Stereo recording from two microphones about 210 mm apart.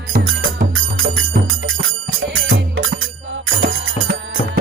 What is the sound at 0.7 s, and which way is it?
Music, 70° right (ahead or behind).